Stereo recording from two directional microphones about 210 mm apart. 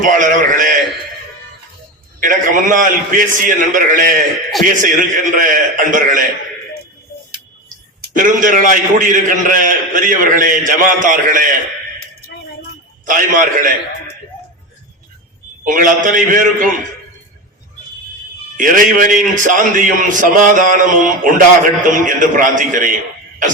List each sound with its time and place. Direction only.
0.0 s a man's voice: 40° right (ahead or behind)
2.2 s a man's voice: 40° right (ahead or behind)
8.0 s a man's voice: 40° right (ahead or behind)
13.1 s a man's voice: 40° right (ahead or behind)
15.6 s a man's voice: 40° right (ahead or behind)
18.5 s a man's voice: 40° right (ahead or behind)